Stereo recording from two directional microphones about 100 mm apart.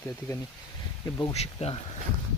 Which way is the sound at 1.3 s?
90° left.